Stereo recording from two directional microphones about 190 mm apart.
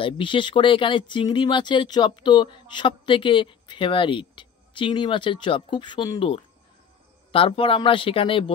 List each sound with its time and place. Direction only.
0.0 s speech: 25° left (ahead or behind)